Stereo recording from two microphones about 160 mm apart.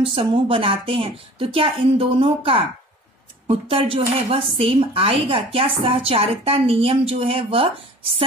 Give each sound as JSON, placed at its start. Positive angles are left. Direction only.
{"t": 0.0, "sound": "a woman's voice", "side_deg": -35}